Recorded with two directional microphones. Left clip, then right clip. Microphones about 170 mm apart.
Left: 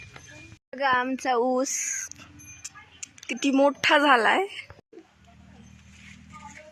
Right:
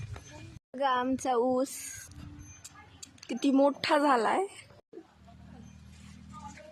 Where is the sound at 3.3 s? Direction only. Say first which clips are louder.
Left 4 dB; 5° left (ahead or behind).